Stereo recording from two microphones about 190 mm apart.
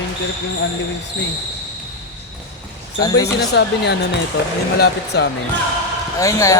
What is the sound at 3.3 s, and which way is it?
Speech, 60° left (ahead or behind).